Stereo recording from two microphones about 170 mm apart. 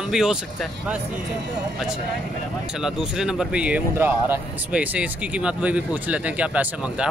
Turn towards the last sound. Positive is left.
turn(degrees=-5)  # may be behind; listen again after turning